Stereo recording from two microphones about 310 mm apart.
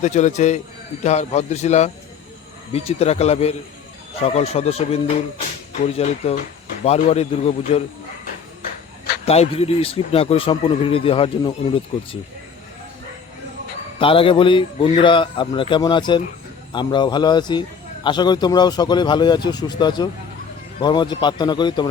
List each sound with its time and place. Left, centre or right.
0.0 s a man's voice: left
6.0 s a man's voice: centre
9.2 s speech: centre
14.0 s speech: centre